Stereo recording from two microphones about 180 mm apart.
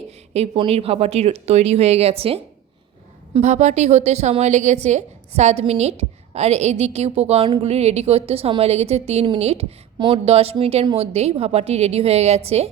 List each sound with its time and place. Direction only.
0.3 s a woman's voice: 30° right (ahead or behind)